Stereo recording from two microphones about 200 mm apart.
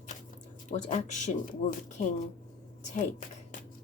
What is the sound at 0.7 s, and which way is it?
Speech, 35° left (ahead or behind).